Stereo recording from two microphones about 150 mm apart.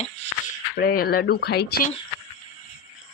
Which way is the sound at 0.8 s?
90° left.